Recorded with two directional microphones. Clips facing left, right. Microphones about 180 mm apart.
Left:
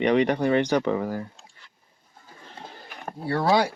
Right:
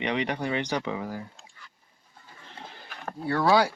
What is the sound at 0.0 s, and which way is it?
Speech, 45° left (ahead or behind).